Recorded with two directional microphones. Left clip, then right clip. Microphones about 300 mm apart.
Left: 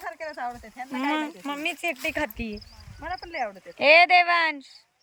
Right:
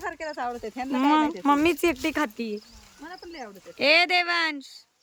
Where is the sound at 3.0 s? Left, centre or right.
Centre.